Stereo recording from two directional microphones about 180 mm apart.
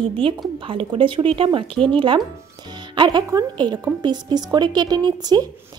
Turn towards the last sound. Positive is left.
turn(degrees=-20)  # may be behind; listen again after turning